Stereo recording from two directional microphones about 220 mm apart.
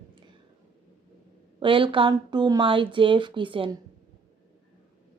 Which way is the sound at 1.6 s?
25° right (ahead or behind).